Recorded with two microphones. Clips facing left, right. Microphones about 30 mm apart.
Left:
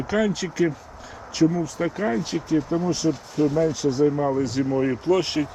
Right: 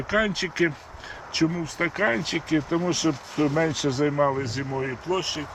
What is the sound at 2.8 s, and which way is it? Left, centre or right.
Speech, right.